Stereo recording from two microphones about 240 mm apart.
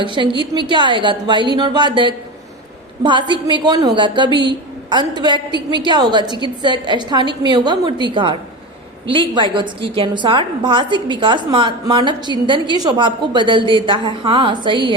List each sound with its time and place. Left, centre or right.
0.0 s a woman's voice: centre